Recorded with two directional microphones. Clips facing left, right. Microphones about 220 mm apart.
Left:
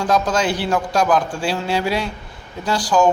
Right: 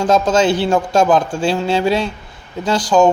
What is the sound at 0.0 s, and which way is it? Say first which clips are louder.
A man's voice: right 5 dB; 25° right (ahead or behind).